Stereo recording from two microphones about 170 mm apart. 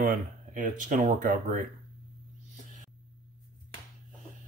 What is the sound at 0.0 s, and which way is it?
Speech, 55° right (ahead or behind).